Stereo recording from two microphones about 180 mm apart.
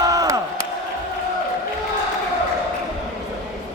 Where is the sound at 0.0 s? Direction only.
20° right (ahead or behind).